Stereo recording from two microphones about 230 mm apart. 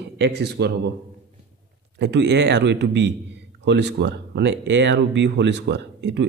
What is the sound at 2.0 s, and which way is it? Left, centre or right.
Speech, right.